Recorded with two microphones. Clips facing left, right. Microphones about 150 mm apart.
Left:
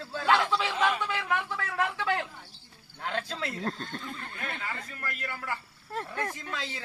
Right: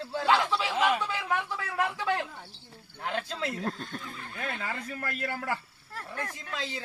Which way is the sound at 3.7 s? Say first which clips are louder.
Left 1 dB; 25° left (ahead or behind).